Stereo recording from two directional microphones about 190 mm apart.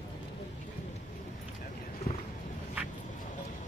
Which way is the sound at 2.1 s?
50° left (ahead or behind).